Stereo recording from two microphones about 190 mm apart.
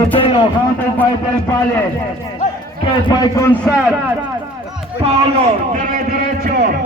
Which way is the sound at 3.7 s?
Centre (ahead or behind).